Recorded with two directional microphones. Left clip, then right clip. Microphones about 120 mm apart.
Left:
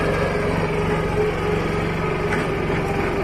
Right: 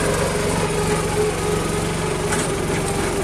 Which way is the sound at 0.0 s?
30° right (ahead or behind).